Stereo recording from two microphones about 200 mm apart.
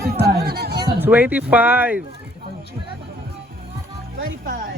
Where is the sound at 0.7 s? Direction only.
20° right (ahead or behind).